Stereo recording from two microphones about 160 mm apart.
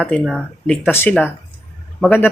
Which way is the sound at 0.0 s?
Centre (ahead or behind).